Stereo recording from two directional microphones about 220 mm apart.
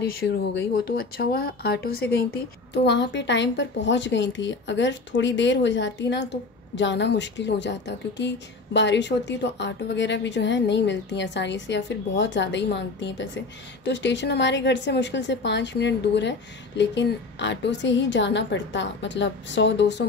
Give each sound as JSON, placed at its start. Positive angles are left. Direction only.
{"t": 0.5, "sound": "a woman's voice", "side_deg": 50}